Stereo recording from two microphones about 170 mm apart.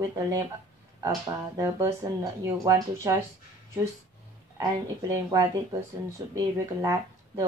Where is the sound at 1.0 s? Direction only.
20° right (ahead or behind).